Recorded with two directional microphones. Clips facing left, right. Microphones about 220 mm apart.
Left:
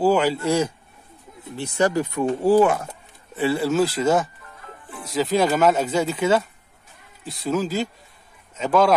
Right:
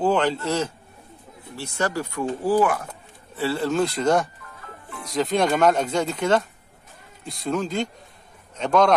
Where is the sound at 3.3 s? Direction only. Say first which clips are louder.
Left 3 dB; 15° left (ahead or behind).